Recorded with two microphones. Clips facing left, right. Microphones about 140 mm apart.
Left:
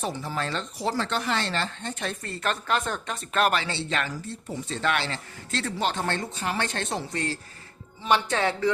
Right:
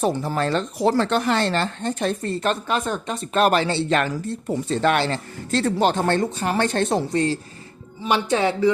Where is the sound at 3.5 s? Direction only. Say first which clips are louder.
Right 8 dB; 40° right (ahead or behind).